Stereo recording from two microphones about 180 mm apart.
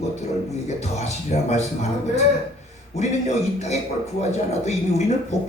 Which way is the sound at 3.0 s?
40° left (ahead or behind).